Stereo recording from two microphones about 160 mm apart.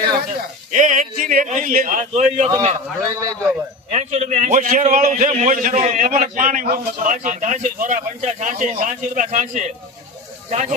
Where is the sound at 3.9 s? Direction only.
45° right (ahead or behind).